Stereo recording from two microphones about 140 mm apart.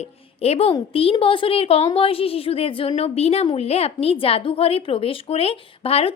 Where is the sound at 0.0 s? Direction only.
50° left (ahead or behind).